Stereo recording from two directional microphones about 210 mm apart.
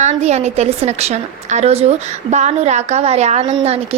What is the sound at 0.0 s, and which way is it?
A woman's voice, 30° right (ahead or behind).